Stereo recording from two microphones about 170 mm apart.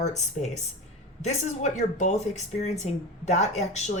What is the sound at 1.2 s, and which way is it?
A woman's voice, 40° left (ahead or behind).